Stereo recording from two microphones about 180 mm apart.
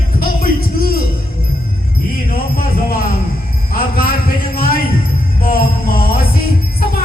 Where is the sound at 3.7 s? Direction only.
55° left (ahead or behind).